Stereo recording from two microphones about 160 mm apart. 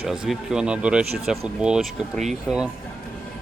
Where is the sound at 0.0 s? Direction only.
5° right (ahead or behind).